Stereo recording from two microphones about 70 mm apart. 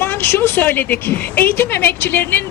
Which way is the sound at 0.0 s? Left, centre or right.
Left.